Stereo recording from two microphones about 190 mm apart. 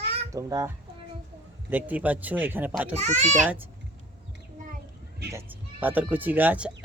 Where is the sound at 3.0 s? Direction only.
35° right (ahead or behind).